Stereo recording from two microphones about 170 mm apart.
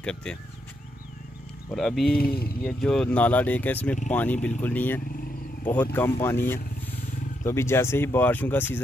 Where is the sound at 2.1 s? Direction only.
65° left (ahead or behind).